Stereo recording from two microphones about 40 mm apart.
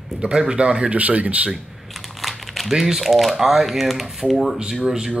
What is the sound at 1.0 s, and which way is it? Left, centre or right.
Speech, right.